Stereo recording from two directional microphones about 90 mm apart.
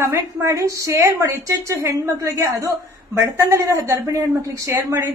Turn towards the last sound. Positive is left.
turn(degrees=-35)  # may be behind; listen again after turning